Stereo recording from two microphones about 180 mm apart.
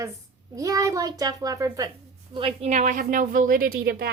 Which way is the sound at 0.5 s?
20° right (ahead or behind).